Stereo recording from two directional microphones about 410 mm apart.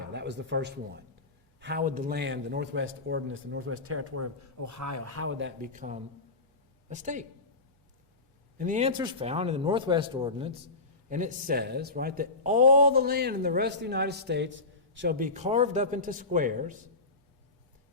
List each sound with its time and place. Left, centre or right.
0.0 s a man's voice: right
8.5 s a man's voice: centre